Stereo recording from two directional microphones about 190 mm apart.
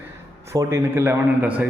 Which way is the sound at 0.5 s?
15° right (ahead or behind).